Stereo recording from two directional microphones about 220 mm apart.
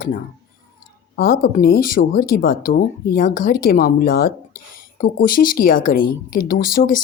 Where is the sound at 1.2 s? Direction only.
40° left (ahead or behind).